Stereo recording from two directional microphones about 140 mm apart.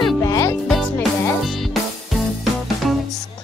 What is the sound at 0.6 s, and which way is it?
Music, centre (ahead or behind).